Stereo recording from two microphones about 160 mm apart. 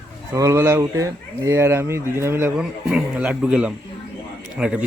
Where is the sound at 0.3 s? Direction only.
20° right (ahead or behind).